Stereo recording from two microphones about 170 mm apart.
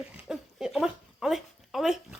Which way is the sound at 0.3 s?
Centre (ahead or behind).